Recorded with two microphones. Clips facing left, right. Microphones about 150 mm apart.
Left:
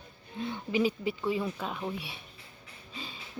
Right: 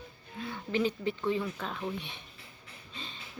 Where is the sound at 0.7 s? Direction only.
10° left (ahead or behind).